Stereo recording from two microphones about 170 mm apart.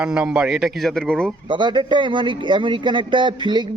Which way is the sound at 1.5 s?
30° right (ahead or behind).